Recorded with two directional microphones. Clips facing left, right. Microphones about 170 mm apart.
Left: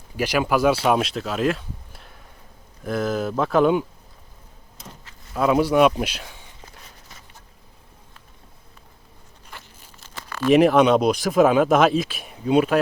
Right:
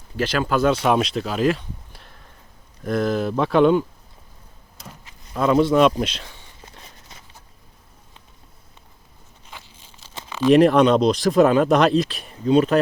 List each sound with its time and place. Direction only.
0.2 s speech: 10° left (ahead or behind)
5.3 s speech: 5° left (ahead or behind)
10.4 s speech: 5° left (ahead or behind)